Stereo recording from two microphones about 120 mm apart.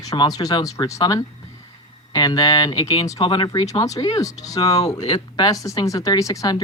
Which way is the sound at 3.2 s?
40° left (ahead or behind).